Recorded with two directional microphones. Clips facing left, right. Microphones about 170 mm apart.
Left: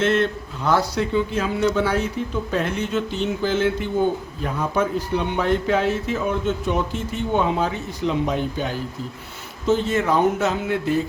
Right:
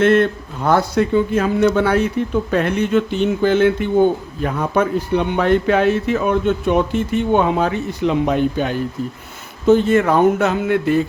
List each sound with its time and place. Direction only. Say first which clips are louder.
0.0 s speech: right 6 dB; 55° right (ahead or behind)